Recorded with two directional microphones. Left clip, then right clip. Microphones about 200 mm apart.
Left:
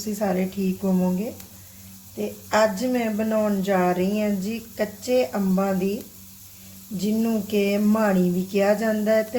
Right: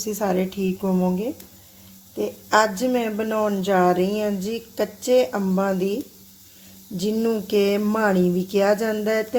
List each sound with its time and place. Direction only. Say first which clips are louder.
0.2 s speech: right 1 dB; 35° right (ahead or behind)
2.2 s speech: right 2 dB; 35° right (ahead or behind)
7.0 s speech: right 3 dB; 35° right (ahead or behind)